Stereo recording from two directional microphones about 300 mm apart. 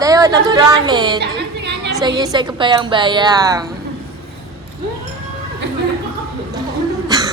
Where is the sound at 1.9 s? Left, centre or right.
Centre.